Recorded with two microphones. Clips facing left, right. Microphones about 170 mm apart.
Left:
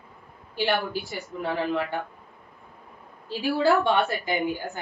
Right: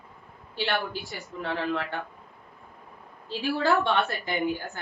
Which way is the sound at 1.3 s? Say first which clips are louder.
Left 3 dB; 15° left (ahead or behind).